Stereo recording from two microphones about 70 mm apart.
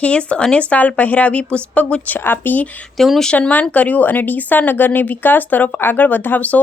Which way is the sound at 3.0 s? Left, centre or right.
Centre.